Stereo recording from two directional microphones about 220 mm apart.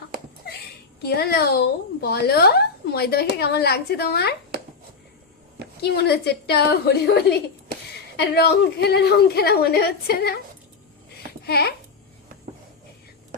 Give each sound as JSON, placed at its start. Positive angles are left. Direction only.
{"t": 0.4, "sound": "a sound", "side_deg": 45}
{"t": 1.0, "sound": "speech", "side_deg": 45}
{"t": 5.8, "sound": "speech", "side_deg": 45}
{"t": 11.1, "sound": "babbling", "side_deg": 45}